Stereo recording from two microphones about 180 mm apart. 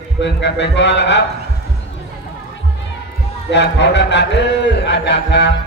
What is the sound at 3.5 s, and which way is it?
A man's voice, 75° left (ahead or behind).